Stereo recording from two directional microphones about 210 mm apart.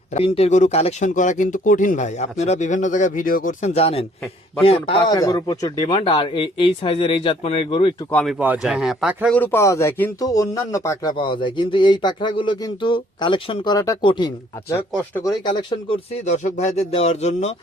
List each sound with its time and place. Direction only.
0.1 s speech: 30° left (ahead or behind)
8.1 s speech: centre (ahead or behind)
9.4 s speech: 10° left (ahead or behind); by 17.5 s 30° left (ahead or behind)